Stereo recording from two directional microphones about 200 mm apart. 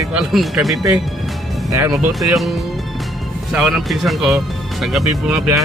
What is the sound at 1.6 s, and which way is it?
Speech, 15° right (ahead or behind).